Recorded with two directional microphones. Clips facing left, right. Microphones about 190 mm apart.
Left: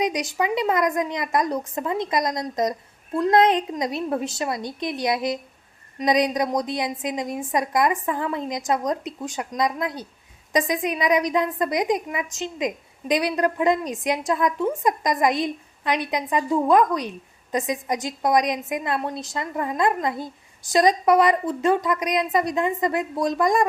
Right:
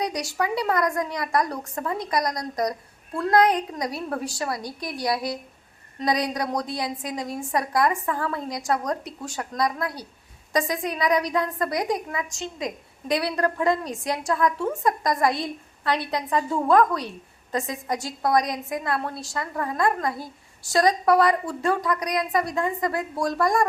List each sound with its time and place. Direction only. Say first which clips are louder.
0.0 s a woman's voice: left 3 dB; 20° left (ahead or behind)